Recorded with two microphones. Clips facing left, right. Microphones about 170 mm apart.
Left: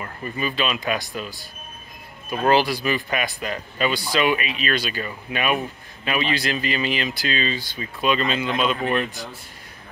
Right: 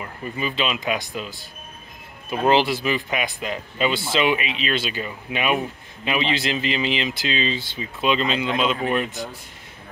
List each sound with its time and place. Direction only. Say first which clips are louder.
0.0 s speech: even; 15° right (ahead or behind)
2.3 s speech: even; 15° right (ahead or behind)